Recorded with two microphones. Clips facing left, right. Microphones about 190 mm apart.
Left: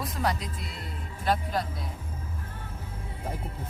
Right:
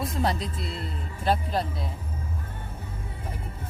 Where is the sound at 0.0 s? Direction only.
25° right (ahead or behind).